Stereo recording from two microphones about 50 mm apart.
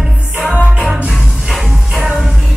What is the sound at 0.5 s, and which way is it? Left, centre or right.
Music, centre.